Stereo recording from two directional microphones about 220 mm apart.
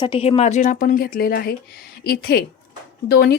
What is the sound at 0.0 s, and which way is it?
A woman's voice, 25° left (ahead or behind).